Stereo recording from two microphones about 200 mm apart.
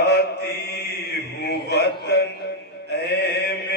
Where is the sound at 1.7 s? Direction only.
55° left (ahead or behind).